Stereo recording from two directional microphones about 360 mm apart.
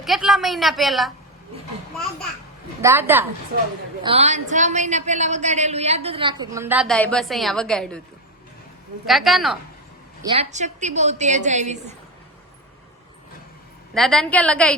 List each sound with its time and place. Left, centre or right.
0.0 s a woman's voice: centre
2.8 s a woman's voice: centre
4.0 s a woman's voice: centre
9.0 s a woman's voice: centre
10.2 s a woman's voice: centre
13.9 s a woman's voice: centre